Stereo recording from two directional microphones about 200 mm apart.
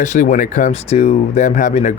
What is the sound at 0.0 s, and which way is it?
Speech, 40° left (ahead or behind).